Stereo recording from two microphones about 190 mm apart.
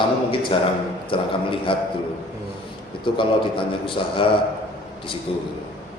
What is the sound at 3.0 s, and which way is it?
A man's voice, 25° left (ahead or behind).